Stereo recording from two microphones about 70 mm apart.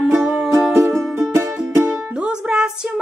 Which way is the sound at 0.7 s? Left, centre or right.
Right.